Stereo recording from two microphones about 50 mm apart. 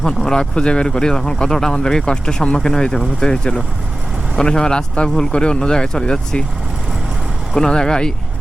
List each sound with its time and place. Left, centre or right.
0.0 s speech: centre
7.5 s speech: centre